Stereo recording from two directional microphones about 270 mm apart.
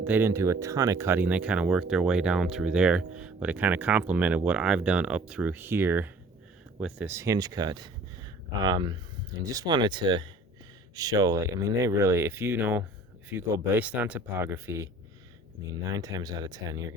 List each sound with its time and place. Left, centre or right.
0.0 s speech: centre